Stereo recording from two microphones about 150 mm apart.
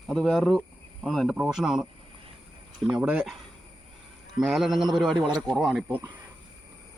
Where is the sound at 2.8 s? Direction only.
5° right (ahead or behind).